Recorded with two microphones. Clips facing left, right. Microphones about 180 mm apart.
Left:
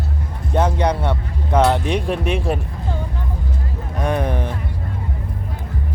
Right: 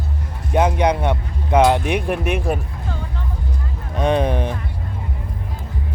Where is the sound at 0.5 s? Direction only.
15° right (ahead or behind).